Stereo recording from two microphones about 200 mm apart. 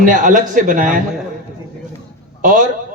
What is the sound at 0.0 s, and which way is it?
Speech, 40° right (ahead or behind).